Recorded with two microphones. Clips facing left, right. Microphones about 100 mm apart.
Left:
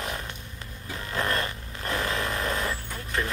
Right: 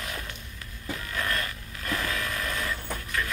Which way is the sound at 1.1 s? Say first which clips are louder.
Left 4 dB; 30° left (ahead or behind).